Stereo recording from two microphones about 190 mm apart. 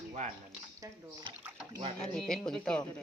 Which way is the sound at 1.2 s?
20° right (ahead or behind).